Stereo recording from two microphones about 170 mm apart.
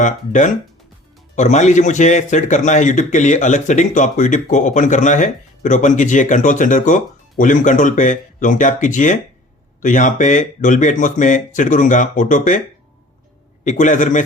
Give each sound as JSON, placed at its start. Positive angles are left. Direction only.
{"t": 0.0, "sound": "a man's voice", "side_deg": 45}
{"t": 13.7, "sound": "a man's voice", "side_deg": 45}